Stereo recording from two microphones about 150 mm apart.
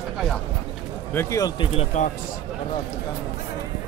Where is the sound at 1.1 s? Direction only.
15° left (ahead or behind).